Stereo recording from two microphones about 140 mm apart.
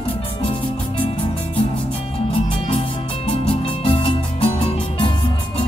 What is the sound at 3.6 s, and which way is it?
Music, 40° left (ahead or behind).